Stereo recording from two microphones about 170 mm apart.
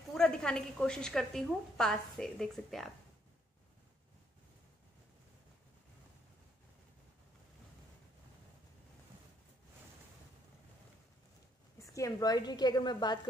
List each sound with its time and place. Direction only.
0.1 s a woman's voice: 5° left (ahead or behind)
11.8 s a woman's voice: 20° left (ahead or behind)